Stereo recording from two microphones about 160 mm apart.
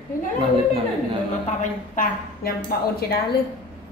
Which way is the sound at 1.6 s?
60° left (ahead or behind).